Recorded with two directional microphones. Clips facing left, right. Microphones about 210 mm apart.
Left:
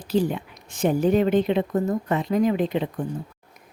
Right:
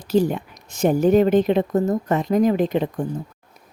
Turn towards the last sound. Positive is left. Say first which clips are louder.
# right 3 dB
turn(degrees=-45)  # may be behind; listen again after turning